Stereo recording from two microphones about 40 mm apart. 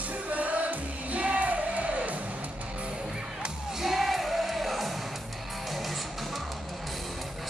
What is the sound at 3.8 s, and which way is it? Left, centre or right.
Music, centre.